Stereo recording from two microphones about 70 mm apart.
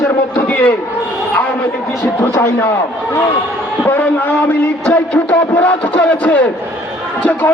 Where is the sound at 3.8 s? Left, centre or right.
Left.